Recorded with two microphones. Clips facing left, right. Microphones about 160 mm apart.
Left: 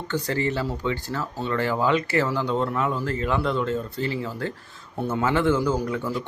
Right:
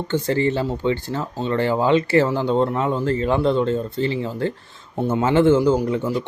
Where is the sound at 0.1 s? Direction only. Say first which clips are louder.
Right 5 dB; 25° right (ahead or behind).